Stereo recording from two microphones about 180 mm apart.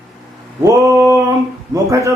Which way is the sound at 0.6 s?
15° right (ahead or behind).